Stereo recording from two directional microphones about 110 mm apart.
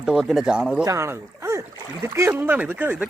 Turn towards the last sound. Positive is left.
turn(degrees=-15)  # may be behind; listen again after turning